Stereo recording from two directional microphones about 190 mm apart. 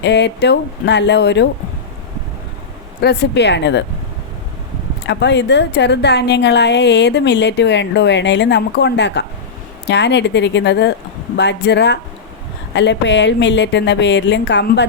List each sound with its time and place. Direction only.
0.0 s a woman's voice: 65° left (ahead or behind)
3.0 s a woman's voice: 60° left (ahead or behind)
5.0 s a woman's voice: 65° left (ahead or behind)